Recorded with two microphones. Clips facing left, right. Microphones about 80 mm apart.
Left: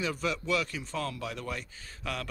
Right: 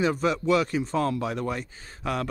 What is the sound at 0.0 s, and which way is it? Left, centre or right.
Speech, right.